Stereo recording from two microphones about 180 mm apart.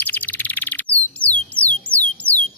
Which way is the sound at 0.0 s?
10° left (ahead or behind).